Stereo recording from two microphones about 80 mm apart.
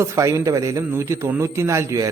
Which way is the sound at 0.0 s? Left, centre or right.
Right.